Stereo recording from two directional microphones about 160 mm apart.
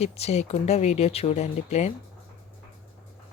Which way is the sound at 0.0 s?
40° left (ahead or behind).